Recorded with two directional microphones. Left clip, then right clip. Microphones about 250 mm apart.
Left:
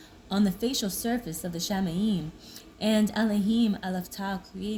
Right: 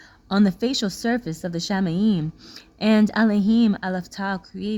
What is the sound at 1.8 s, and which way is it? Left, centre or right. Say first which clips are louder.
Speech: right 7 dB; right.